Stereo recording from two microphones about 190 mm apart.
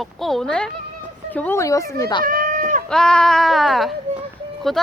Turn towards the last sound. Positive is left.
turn(degrees=0)  # may be behind; listen again after turning